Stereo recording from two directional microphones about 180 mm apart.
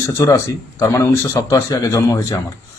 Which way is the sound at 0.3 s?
15° left (ahead or behind).